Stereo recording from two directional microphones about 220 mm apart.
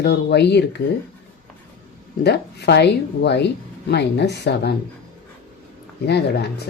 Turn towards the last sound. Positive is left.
turn(degrees=50)  # may be behind; listen again after turning